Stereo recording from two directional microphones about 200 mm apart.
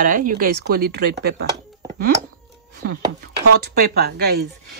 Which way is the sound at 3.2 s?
50° right (ahead or behind).